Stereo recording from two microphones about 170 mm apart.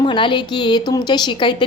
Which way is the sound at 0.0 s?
30° left (ahead or behind).